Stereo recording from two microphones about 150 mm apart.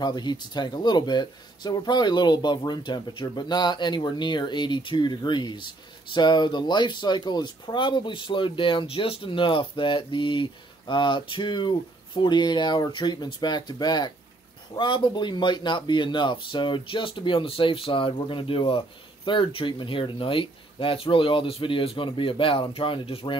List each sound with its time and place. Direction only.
0.0 s speech: 30° left (ahead or behind)